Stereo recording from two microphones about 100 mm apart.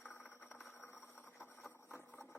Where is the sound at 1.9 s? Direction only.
20° left (ahead or behind).